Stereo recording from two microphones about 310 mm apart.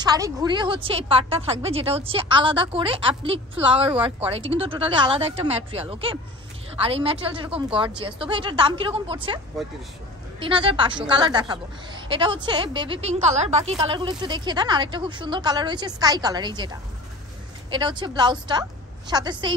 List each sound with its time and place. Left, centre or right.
0.0 s a woman's voice: centre
10.4 s a woman's voice: centre